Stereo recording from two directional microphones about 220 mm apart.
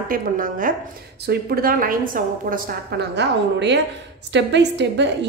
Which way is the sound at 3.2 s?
50° right (ahead or behind).